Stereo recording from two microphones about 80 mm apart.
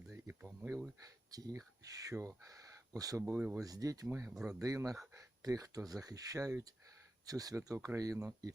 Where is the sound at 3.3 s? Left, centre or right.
Right.